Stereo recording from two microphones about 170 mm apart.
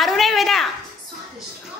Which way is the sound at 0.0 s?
Centre (ahead or behind).